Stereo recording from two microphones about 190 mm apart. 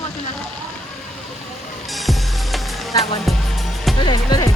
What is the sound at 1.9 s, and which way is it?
Music, centre (ahead or behind).